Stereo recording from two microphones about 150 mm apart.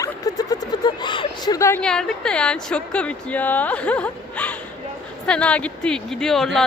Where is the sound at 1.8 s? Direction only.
5° left (ahead or behind).